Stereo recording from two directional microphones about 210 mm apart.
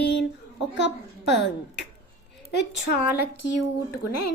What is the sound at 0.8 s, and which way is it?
A woman's voice, 55° left (ahead or behind).